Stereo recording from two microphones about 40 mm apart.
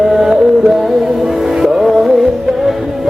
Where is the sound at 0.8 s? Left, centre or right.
Centre.